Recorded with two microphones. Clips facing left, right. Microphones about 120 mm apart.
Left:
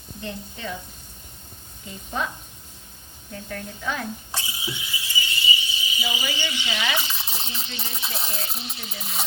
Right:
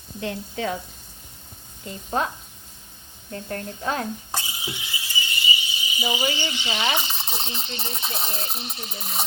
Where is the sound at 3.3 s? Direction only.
40° right (ahead or behind).